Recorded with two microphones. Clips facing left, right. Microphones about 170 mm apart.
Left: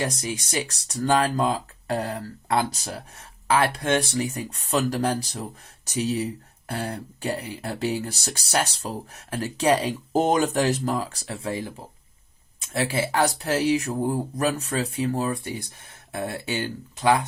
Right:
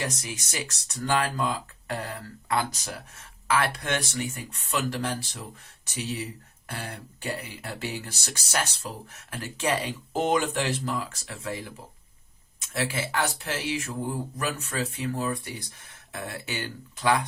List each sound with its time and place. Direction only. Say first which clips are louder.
0.0 s speech: left 5 dB; 35° left (ahead or behind)